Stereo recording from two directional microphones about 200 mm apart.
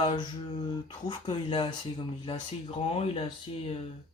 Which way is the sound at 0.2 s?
20° left (ahead or behind).